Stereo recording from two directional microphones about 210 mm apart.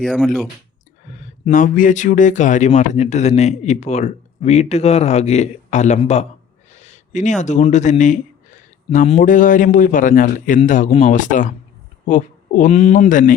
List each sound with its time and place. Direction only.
0.0 s speech: 5° right (ahead or behind)
1.2 s speech: 35° left (ahead or behind)